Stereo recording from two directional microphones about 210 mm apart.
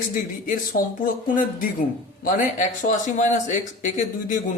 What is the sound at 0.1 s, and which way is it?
Speech, 40° left (ahead or behind).